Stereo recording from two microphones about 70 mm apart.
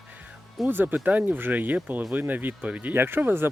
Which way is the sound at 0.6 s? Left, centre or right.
Right.